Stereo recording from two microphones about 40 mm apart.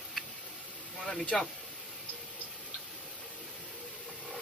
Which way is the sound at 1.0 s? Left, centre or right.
Centre.